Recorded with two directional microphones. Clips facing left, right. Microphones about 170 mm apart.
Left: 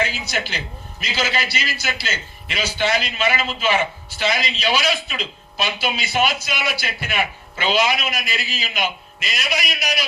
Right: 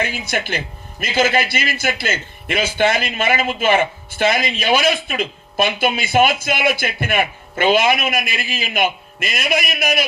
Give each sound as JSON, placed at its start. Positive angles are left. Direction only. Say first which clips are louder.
{"t": 0.0, "sound": "a man's voice", "louder": "right 2 dB", "side_deg": -55}